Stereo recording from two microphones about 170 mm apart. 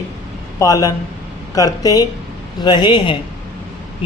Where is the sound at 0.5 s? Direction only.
20° left (ahead or behind).